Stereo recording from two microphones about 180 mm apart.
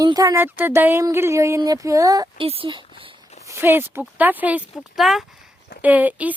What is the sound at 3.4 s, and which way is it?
Speech, 15° right (ahead or behind).